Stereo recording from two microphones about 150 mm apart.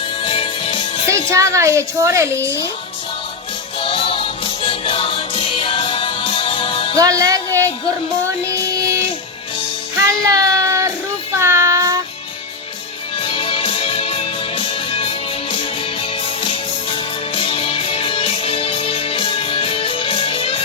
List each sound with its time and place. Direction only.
0.2 s music: 35° left (ahead or behind)
1.0 s speech: 20° right (ahead or behind)
3.8 s music: 35° left (ahead or behind)
6.9 s music: 25° right (ahead or behind)
10.1 s child singing: 25° right (ahead or behind)
13.2 s music: 35° left (ahead or behind)